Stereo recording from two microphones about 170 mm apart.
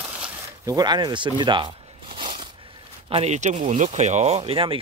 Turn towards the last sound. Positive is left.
turn(degrees=-30)  # may be behind; listen again after turning